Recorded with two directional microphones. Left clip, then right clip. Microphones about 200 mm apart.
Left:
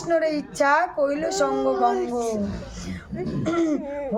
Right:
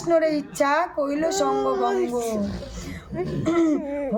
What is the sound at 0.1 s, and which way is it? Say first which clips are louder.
Speech: right 2 dB; 5° left (ahead or behind).